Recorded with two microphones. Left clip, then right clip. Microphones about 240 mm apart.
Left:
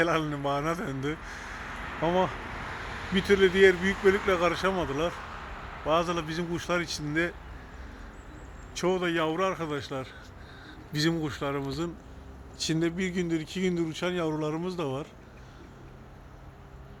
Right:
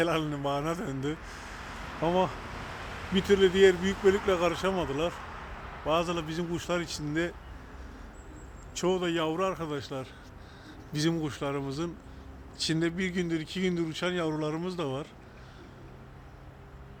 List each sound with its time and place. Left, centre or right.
0.0 s a man's voice: centre
1.7 s a sound: right
2.0 s speech: centre
2.3 s a sound: right
3.2 s a man's voice: centre
8.7 s a man's voice: centre